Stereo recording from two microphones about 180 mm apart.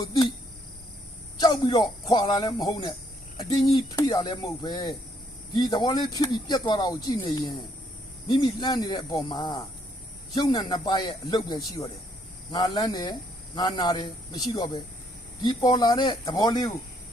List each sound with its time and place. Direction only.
0.0 s speech: 20° left (ahead or behind)
1.4 s speech: 25° left (ahead or behind)